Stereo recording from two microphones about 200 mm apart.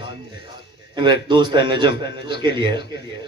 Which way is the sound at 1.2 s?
20° right (ahead or behind).